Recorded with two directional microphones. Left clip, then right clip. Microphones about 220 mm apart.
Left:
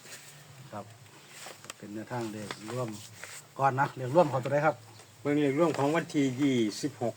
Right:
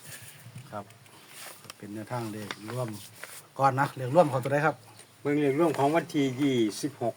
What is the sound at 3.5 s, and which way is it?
Speech, 45° right (ahead or behind).